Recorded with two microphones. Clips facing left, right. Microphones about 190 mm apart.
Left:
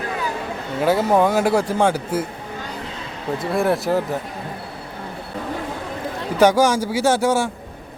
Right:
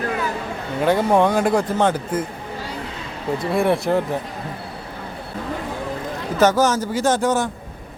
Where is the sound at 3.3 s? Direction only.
Centre (ahead or behind).